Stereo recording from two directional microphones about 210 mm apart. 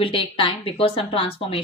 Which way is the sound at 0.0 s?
25° left (ahead or behind).